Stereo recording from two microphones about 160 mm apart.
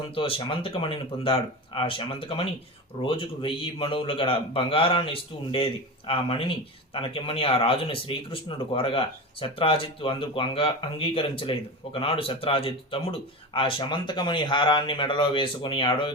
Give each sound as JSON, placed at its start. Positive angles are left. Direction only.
{"t": 0.1, "sound": "a man's voice", "side_deg": 35}